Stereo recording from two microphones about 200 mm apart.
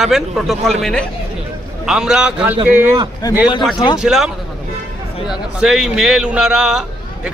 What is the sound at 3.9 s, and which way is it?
Speech, centre (ahead or behind).